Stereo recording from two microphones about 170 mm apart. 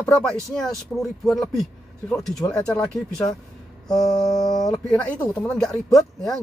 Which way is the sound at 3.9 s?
Centre (ahead or behind).